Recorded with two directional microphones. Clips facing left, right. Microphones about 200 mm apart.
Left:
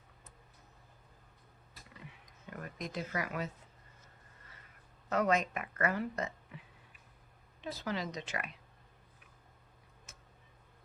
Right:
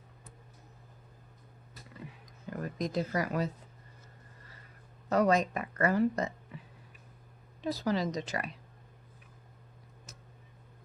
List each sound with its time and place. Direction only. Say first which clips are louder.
2.5 s speech: right 8 dB; 35° right (ahead or behind)
5.0 s speech: right 5 dB; 35° right (ahead or behind)
7.6 s speech: right 7 dB; 35° right (ahead or behind)